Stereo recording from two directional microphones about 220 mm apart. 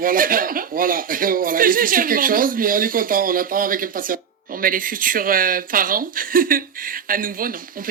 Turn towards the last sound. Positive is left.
turn(degrees=-40)  # may be behind; listen again after turning